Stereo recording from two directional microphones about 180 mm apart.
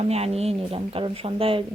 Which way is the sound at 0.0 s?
35° right (ahead or behind).